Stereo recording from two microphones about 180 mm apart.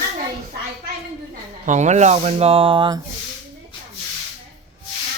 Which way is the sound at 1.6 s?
40° right (ahead or behind).